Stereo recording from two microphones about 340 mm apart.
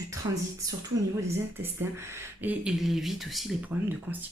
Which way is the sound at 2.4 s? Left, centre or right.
Centre.